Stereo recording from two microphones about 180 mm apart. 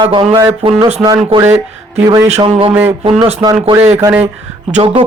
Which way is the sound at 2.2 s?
35° right (ahead or behind).